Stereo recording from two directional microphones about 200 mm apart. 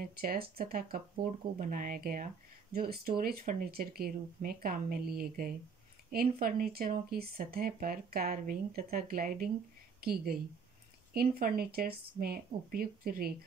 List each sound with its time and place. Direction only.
0.0 s speech: 50° right (ahead or behind)